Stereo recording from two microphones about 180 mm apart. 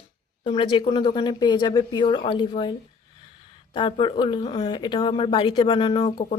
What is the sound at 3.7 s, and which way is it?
Speech, 30° left (ahead or behind).